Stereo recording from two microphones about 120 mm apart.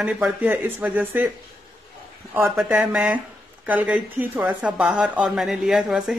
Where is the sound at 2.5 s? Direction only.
10° right (ahead or behind).